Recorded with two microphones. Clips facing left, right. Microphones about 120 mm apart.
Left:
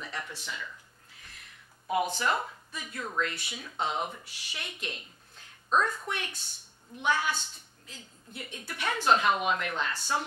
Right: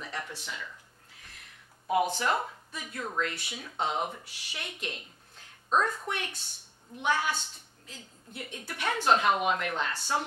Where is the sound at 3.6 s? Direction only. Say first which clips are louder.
Right 1 dB; 40° right (ahead or behind).